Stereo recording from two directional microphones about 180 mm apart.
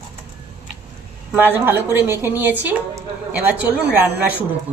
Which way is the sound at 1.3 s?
10° right (ahead or behind).